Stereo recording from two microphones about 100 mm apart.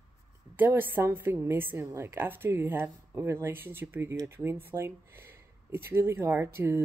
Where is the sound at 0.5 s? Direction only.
20° right (ahead or behind).